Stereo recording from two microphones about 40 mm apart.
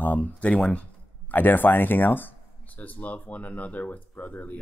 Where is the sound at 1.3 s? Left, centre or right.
Left.